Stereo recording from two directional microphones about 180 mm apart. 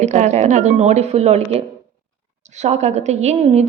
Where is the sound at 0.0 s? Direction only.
40° right (ahead or behind).